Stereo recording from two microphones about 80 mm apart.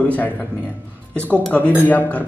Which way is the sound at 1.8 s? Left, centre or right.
Left.